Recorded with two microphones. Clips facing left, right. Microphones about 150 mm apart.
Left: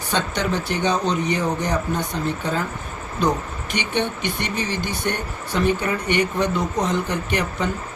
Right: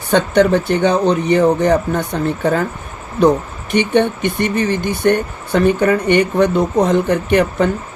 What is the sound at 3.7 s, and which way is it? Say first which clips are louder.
Speech: right 10 dB; 55° right (ahead or behind).